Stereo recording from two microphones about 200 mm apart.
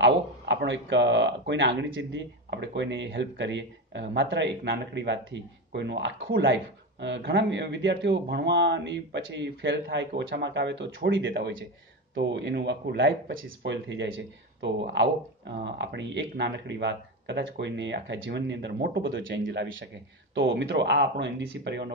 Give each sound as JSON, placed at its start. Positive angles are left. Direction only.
{"t": 0.0, "sound": "speech", "side_deg": -60}